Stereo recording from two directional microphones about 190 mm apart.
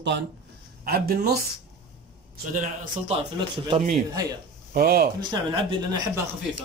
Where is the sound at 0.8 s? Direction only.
50° right (ahead or behind).